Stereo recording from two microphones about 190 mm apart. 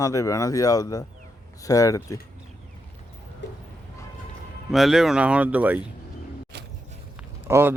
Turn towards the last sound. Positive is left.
turn(degrees=-10)  # may be behind; listen again after turning